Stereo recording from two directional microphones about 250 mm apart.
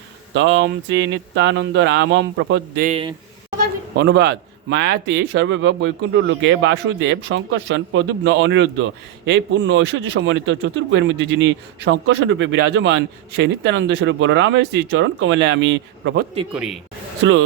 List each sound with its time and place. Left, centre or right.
0.3 s a man's voice: right
2.8 s a man's voice: right
3.9 s a man's voice: right
17.2 s a man's voice: right